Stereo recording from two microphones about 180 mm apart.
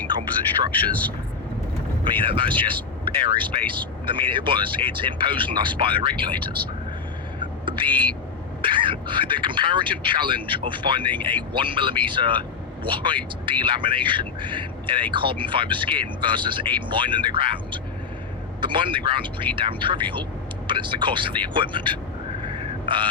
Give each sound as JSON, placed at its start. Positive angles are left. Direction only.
{"t": 0.7, "sound": "speech", "side_deg": 10}
{"t": 2.0, "sound": "speech", "side_deg": -30}
{"t": 7.3, "sound": "whispering", "side_deg": -25}
{"t": 8.6, "sound": "speech", "side_deg": -30}
{"t": 22.4, "sound": "a sound", "side_deg": -30}